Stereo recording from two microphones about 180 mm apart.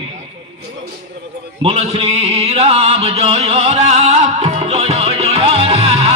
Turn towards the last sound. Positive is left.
turn(degrees=-35)  # may be behind; listen again after turning